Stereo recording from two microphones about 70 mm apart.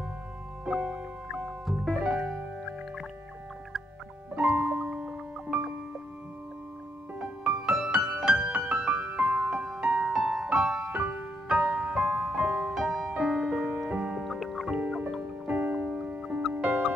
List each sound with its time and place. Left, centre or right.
0.7 s music: centre
4.4 s music: centre
7.2 s music: centre
9.1 s music: centre
9.5 s music: centre
10.9 s music: centre
14.8 s music: centre